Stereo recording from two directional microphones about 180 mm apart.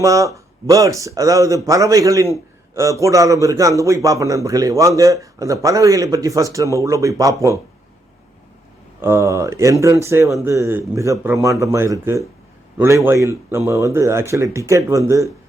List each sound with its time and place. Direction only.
0.0 s a man's voice: 15° right (ahead or behind)
9.0 s a man's voice: 15° right (ahead or behind)